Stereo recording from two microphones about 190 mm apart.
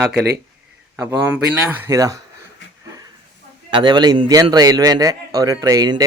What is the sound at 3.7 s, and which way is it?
A man's voice, 25° right (ahead or behind).